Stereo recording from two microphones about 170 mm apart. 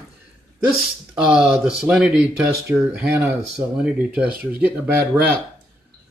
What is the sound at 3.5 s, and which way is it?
Speech, 5° right (ahead or behind).